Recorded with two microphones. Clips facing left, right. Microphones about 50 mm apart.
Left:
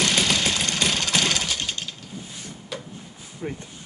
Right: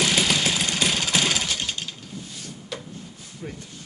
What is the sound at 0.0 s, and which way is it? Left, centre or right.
Vehicle, centre.